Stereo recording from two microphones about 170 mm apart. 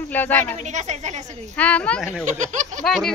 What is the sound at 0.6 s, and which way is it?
Speech, 45° right (ahead or behind).